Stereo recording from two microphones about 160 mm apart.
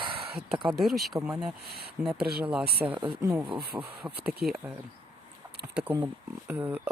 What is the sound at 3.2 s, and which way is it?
Speech, 20° right (ahead or behind).